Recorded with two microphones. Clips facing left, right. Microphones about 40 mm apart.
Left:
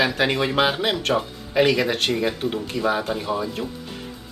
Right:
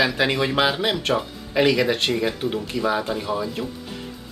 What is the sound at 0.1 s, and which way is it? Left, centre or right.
Speech, centre.